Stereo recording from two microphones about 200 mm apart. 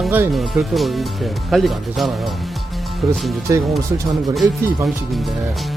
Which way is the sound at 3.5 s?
15° right (ahead or behind).